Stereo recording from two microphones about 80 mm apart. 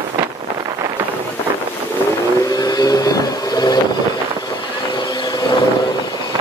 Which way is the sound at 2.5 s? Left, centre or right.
Left.